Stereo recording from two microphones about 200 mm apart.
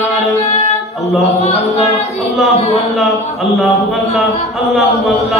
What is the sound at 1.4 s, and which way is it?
Chant, 30° left (ahead or behind).